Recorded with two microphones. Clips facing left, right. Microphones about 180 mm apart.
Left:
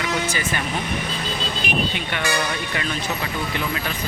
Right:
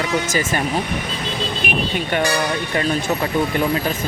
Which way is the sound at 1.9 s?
40° right (ahead or behind).